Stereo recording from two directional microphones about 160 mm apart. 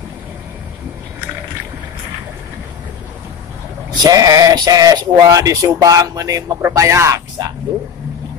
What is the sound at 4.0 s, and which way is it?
Speech, 20° right (ahead or behind).